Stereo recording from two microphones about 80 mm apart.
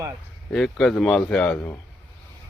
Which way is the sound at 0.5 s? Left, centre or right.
Centre.